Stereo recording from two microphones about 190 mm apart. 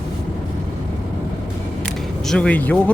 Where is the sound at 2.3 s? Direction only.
5° left (ahead or behind).